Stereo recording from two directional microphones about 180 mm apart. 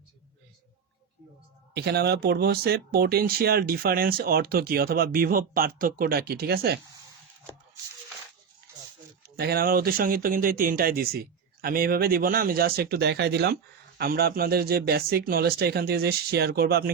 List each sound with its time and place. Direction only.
1.7 s speech: 65° right (ahead or behind)
9.2 s speech: 60° right (ahead or behind)